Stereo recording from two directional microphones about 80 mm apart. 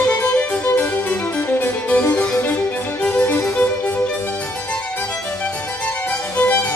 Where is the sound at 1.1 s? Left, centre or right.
Left.